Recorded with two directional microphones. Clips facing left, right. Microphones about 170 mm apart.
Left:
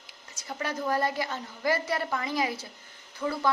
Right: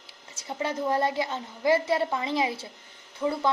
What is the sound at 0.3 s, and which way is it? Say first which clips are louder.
A woman's voice: right 3 dB; 25° right (ahead or behind).